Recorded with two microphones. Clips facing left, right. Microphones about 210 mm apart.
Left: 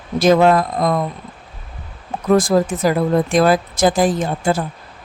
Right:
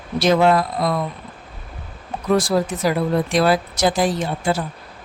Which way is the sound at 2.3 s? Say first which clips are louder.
Left 4 dB; 50° left (ahead or behind).